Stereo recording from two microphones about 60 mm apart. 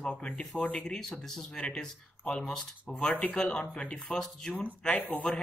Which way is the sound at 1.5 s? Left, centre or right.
Centre.